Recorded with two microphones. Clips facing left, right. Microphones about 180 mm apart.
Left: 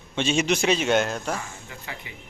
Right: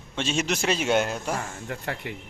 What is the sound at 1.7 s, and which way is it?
Speech, 60° right (ahead or behind).